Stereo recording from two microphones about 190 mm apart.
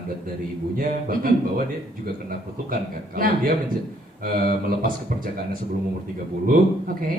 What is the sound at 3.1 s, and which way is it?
A woman's voice, 50° right (ahead or behind).